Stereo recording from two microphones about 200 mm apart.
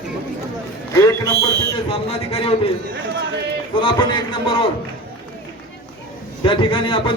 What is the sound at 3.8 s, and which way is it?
Speech, 25° left (ahead or behind).